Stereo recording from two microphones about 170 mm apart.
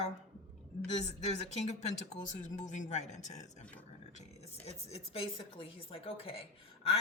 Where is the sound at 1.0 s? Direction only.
40° left (ahead or behind).